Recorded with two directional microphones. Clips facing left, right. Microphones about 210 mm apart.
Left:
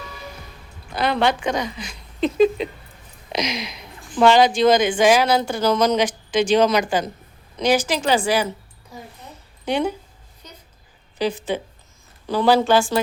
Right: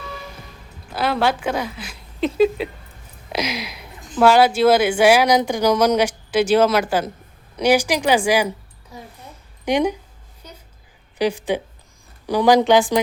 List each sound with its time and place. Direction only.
0.9 s a woman's voice: 5° right (ahead or behind)
3.3 s a sound: 5° right (ahead or behind)
4.2 s speech: 5° right (ahead or behind)
9.6 s speech: 15° right (ahead or behind)
10.4 s a sound: 10° right (ahead or behind)
11.2 s speech: 15° right (ahead or behind)